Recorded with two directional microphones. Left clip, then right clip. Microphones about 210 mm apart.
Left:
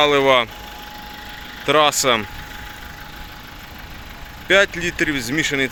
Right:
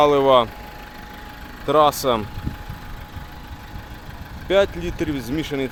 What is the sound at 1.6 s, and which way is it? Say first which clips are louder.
Speech: left 1 dB; centre (ahead or behind).